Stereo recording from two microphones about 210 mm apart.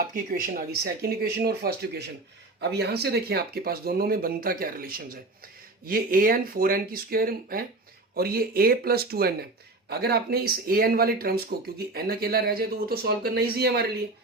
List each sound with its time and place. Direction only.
0.1 s speech: 40° right (ahead or behind)